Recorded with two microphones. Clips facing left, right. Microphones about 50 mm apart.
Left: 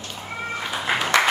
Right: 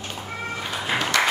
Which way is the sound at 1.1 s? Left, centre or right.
Left.